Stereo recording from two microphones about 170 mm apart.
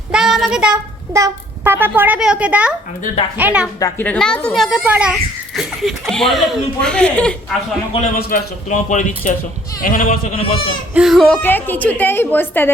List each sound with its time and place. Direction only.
0.1 s child singing: centre (ahead or behind)
1.1 s a child's voice: 15° right (ahead or behind)
3.8 s a woman's voice: 20° left (ahead or behind)
4.0 s a child's voice: 5° left (ahead or behind)
8.1 s speech: 55° left (ahead or behind)
10.3 s speech: 35° left (ahead or behind)
10.9 s speech: centre (ahead or behind)
11.4 s a woman's voice: 10° left (ahead or behind)